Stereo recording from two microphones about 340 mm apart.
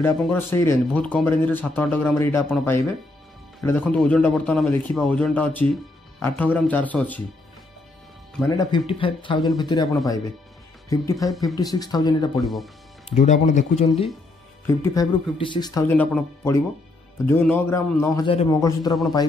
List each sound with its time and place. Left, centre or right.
0.0 s a man's voice: centre
8.4 s speech: centre
11.2 s a man's voice: centre
11.5 s speech: centre
12.4 s a man's voice: centre
13.1 s speech: centre